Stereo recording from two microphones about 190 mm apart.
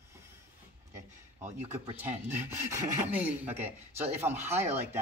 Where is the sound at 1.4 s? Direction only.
35° right (ahead or behind).